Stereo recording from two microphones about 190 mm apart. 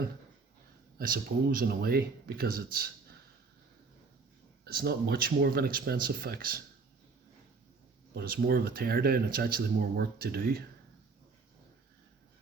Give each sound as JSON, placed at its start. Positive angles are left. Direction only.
{"t": 0.9, "sound": "speech", "side_deg": -50}
{"t": 4.6, "sound": "speech", "side_deg": -55}
{"t": 8.1, "sound": "speech", "side_deg": -55}